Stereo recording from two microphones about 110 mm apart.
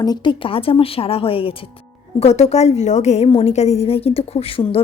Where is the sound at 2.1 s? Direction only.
75° left (ahead or behind).